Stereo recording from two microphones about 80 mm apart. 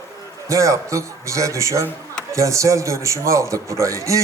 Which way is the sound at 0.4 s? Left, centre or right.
Right.